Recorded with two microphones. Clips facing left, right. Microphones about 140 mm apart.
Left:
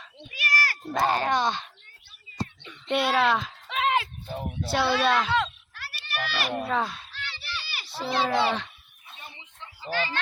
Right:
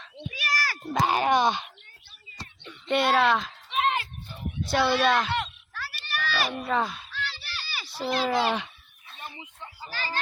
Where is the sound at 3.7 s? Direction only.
90° left.